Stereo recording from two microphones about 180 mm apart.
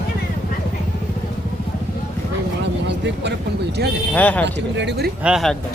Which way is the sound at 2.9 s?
70° right (ahead or behind).